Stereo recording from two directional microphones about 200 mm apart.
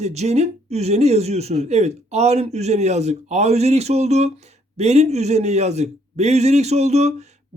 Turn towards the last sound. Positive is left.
turn(degrees=-35)  # may be behind; listen again after turning